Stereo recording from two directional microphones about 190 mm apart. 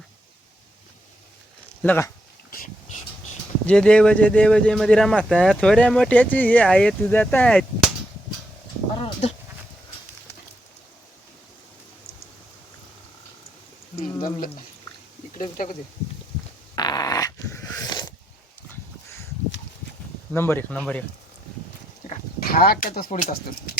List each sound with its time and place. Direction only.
1.8 s speech: 10° left (ahead or behind)
2.5 s a sound: 50° left (ahead or behind)
3.7 s speech: 5° left (ahead or behind)
9.0 s sheep: 30° left (ahead or behind)
14.2 s a sound: 45° left (ahead or behind)
16.7 s dog: 20° left (ahead or behind)
20.3 s speech: 10° left (ahead or behind)
22.4 s speech: 50° left (ahead or behind)